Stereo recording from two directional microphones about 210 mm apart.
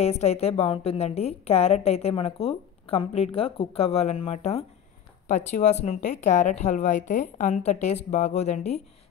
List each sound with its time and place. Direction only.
0.0 s a woman's voice: 30° left (ahead or behind)